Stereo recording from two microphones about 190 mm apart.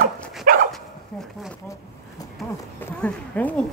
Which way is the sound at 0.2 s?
Centre (ahead or behind).